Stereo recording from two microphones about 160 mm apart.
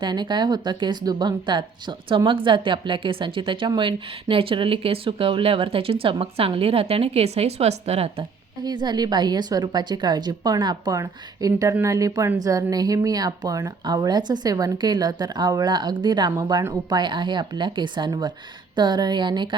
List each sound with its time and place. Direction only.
0.0 s speech: 30° right (ahead or behind)
8.6 s a woman's voice: 25° right (ahead or behind)